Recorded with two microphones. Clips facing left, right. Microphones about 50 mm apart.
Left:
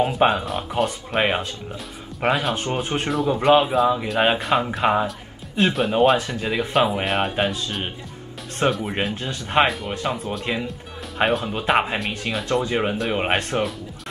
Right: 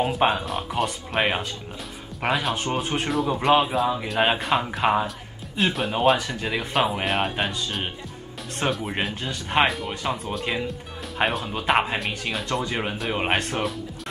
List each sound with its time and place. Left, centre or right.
0.0 s speech: centre